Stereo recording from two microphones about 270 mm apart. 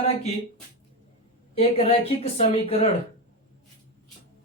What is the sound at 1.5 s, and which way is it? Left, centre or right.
Speech, left.